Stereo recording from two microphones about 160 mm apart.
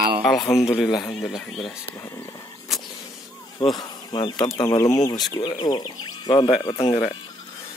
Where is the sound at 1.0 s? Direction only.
Centre (ahead or behind).